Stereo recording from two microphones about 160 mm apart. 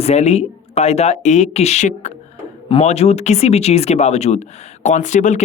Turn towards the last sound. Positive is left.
turn(degrees=50)  # may be behind; listen again after turning